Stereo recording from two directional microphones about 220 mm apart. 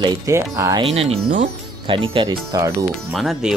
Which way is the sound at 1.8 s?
20° right (ahead or behind).